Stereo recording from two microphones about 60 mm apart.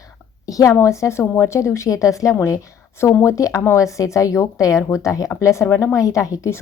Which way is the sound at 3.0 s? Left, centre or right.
Left.